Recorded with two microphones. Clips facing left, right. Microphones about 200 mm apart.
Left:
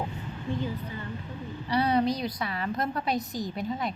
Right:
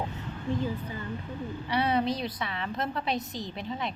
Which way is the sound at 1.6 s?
5° right (ahead or behind).